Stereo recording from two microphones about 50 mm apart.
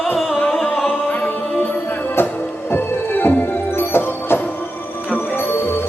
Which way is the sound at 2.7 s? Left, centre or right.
Left.